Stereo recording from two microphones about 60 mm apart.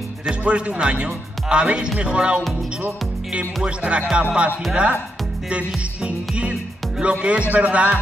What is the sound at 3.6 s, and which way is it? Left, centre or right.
Speech, centre.